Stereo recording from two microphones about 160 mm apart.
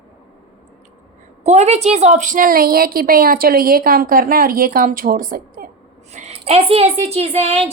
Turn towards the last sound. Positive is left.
turn(degrees=-40)  # may be behind; listen again after turning